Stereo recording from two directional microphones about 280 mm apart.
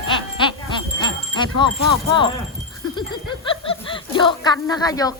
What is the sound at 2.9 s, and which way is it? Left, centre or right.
Speech, centre.